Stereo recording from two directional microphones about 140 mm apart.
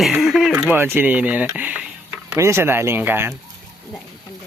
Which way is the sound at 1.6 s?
10° right (ahead or behind).